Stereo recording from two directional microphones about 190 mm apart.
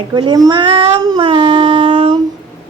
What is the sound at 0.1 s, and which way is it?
Speech, 20° right (ahead or behind).